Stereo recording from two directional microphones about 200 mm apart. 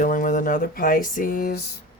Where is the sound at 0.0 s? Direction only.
40° left (ahead or behind).